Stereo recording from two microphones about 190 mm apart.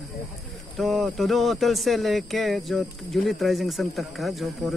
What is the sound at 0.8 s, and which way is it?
Speech, centre (ahead or behind).